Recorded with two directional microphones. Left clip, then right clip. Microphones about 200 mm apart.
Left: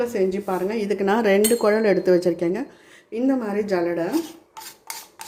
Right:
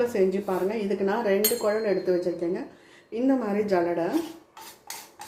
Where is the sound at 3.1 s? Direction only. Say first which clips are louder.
Left 2 dB; 20° left (ahead or behind).